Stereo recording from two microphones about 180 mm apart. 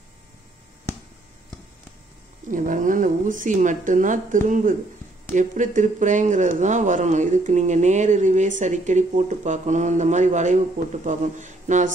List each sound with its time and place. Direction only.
2.5 s speech: 45° right (ahead or behind)